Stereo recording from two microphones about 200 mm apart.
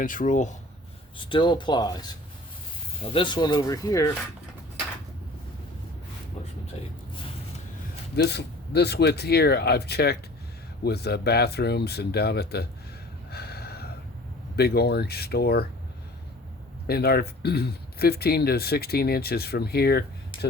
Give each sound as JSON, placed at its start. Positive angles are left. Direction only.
{"t": 0.0, "sound": "speech", "side_deg": 40}
{"t": 1.2, "sound": "speech", "side_deg": 25}
{"t": 8.1, "sound": "speech", "side_deg": 55}
{"t": 13.3, "sound": "gasp", "side_deg": 50}
{"t": 14.5, "sound": "speech", "side_deg": 50}
{"t": 16.8, "sound": "speech", "side_deg": 50}